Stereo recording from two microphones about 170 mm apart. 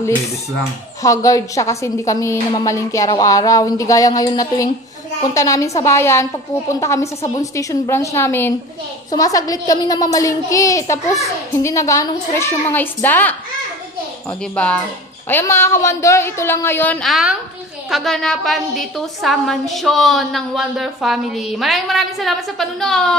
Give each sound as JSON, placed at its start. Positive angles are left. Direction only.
{"t": 1.0, "sound": "a woman's voice", "side_deg": 20}
{"t": 14.4, "sound": "a child's voice", "side_deg": 5}
{"t": 17.1, "sound": "a woman's voice", "side_deg": 0}